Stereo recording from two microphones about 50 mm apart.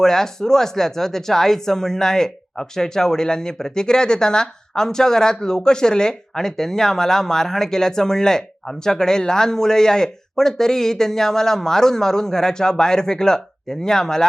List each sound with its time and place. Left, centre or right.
0.0 s speech: centre